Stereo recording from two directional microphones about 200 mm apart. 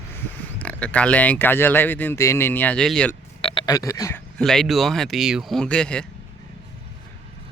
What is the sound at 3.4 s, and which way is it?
Speech, 20° left (ahead or behind).